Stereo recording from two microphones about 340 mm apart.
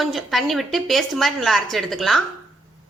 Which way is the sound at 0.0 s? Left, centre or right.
Centre.